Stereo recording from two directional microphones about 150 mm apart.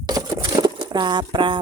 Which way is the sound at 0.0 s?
25° right (ahead or behind).